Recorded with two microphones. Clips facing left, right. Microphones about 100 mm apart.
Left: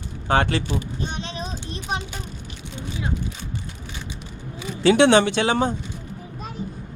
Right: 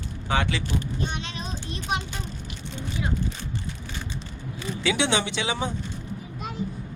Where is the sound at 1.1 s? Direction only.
35° left (ahead or behind).